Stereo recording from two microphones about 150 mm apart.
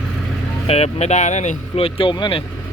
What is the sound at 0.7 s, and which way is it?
Speech, 45° left (ahead or behind).